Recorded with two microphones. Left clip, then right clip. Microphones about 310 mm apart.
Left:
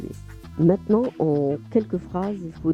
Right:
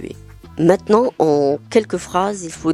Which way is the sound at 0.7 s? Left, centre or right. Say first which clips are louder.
Right 9 dB; centre.